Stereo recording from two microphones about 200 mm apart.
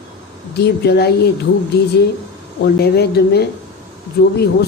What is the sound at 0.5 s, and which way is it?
Speech, 55° left (ahead or behind).